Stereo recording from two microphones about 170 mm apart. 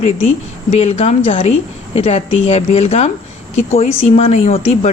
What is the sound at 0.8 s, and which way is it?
A woman's voice, 40° left (ahead or behind).